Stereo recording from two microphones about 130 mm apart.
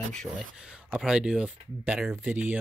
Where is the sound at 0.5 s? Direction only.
5° right (ahead or behind).